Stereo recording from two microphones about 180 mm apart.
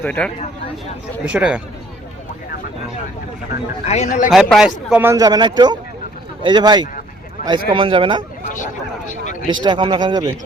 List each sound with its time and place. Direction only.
0.0 s speech: 10° left (ahead or behind)
1.3 s speech: 5° right (ahead or behind)
3.8 s a man's voice: 40° left (ahead or behind)
4.3 s speech: centre (ahead or behind)
5.1 s a man's voice: 20° right (ahead or behind)
8.5 s speech: 45° left (ahead or behind)
9.6 s a man's voice: 25° right (ahead or behind)